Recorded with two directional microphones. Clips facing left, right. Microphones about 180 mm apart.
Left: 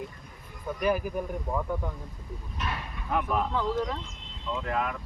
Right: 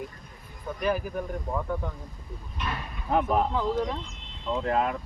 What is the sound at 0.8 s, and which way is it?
Speech, 10° left (ahead or behind).